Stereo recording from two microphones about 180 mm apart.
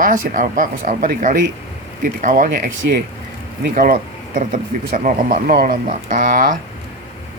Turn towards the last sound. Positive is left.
turn(degrees=-45)  # may be behind; listen again after turning